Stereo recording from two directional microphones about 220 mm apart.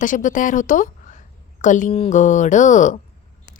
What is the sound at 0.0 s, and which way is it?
A woman's voice, 35° left (ahead or behind).